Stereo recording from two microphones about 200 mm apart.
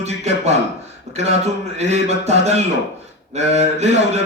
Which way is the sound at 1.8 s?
35° right (ahead or behind).